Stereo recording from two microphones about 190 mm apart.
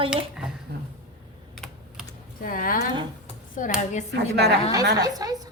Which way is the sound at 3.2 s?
45° left (ahead or behind).